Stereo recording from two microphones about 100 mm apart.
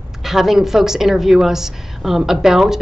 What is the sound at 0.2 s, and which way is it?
A woman's voice, 5° right (ahead or behind).